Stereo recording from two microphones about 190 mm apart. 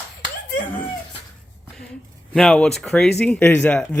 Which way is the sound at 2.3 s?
5° left (ahead or behind).